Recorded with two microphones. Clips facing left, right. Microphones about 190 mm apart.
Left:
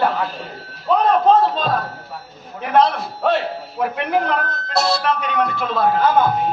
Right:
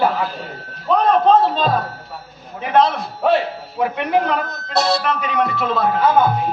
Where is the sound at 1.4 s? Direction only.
Centre (ahead or behind).